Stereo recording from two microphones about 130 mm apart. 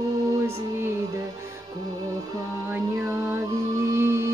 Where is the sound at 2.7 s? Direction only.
20° right (ahead or behind).